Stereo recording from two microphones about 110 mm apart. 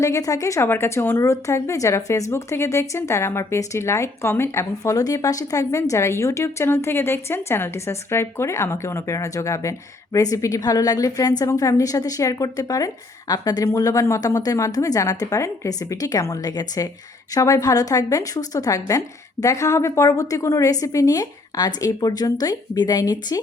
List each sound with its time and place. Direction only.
0.0 s a woman's voice: 30° left (ahead or behind)